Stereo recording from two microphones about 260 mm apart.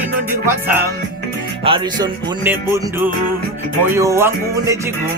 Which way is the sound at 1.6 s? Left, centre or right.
Centre.